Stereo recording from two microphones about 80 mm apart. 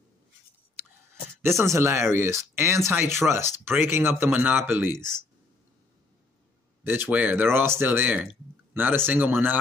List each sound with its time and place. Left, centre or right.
1.6 s speech: right
6.8 s speech: right